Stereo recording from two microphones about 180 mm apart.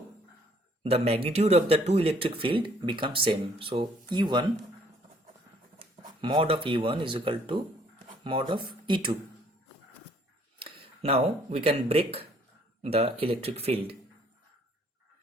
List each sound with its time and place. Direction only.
0.9 s speech: 35° right (ahead or behind)
6.1 s speech: 30° right (ahead or behind)
10.6 s speech: 30° right (ahead or behind)